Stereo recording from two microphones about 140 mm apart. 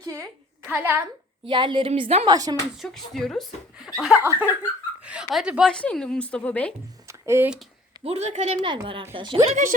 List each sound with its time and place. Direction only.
0.0 s speech: 20° right (ahead or behind)
1.5 s a woman's voice: 35° right (ahead or behind)
1.9 s a woman's voice: 45° right (ahead or behind)
2.2 s speech: 30° right (ahead or behind)
2.7 s speech: centre (ahead or behind)
4.2 s speech: 15° right (ahead or behind)
5.0 s speech: 5° right (ahead or behind)
5.7 s a woman's voice: 5° left (ahead or behind)
7.1 s a sound: 20° right (ahead or behind)
8.0 s a woman's voice: 50° right (ahead or behind)
8.6 s a woman's voice: 35° right (ahead or behind)
9.5 s speech: 65° right (ahead or behind)